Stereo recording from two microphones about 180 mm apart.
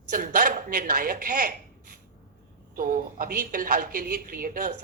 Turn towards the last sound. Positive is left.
turn(degrees=-50)  # may be behind; listen again after turning